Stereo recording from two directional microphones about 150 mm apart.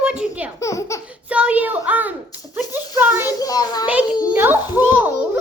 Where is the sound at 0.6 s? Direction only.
20° left (ahead or behind).